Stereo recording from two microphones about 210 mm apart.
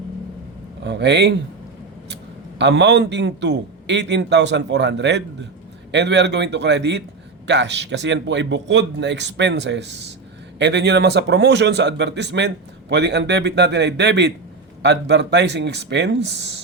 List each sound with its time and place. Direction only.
0.9 s a man's voice: 55° right (ahead or behind)
2.6 s a man's voice: 55° right (ahead or behind)